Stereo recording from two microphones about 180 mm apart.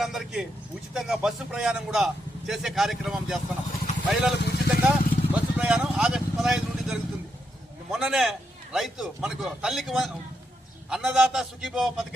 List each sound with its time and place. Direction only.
0.0 s a man's voice: centre (ahead or behind)
4.4 s vehicle: 65° left (ahead or behind)
4.7 s vehicle: 5° right (ahead or behind)
7.9 s a man's voice: 5° right (ahead or behind)